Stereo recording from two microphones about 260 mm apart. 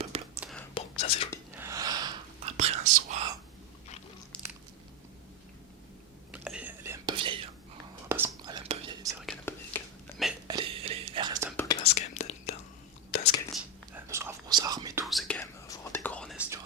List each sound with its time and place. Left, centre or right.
0.3 s whispering: centre
0.7 s whispering: left
1.5 s gasp: centre
2.6 s whispering: right
6.3 s whispering: centre
9.2 s whispering: centre
10.4 s whispering: centre
11.5 s whispering: centre
13.5 s whispering: centre
15.0 s whispering: centre
15.4 s whispering: centre